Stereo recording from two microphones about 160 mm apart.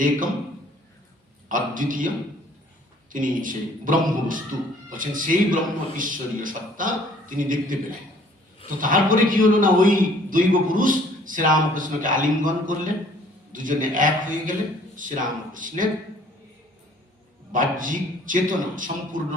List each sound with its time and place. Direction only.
1.5 s a man's voice: 55° right (ahead or behind)
8.8 s a man's voice: 55° right (ahead or behind)
17.5 s a man's voice: 55° right (ahead or behind)